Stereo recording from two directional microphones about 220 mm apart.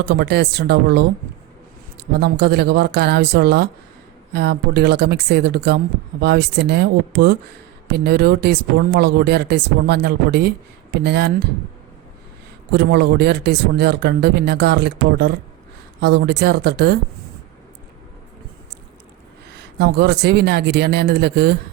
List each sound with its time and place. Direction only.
0.0 s speech: 45° right (ahead or behind)
12.7 s speech: 50° right (ahead or behind)
19.5 s speech: 50° right (ahead or behind)